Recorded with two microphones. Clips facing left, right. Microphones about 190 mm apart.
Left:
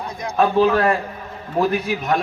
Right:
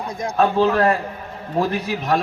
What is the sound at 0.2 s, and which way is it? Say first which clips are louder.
Speech: left 1 dB; 35° right (ahead or behind).